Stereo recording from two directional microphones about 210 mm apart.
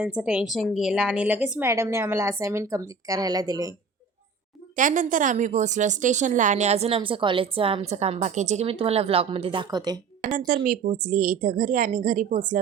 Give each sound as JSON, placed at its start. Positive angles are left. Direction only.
{"t": 0.0, "sound": "a woman's voice", "side_deg": -5}
{"t": 4.8, "sound": "a woman's voice", "side_deg": -40}
{"t": 10.3, "sound": "a woman's voice", "side_deg": -40}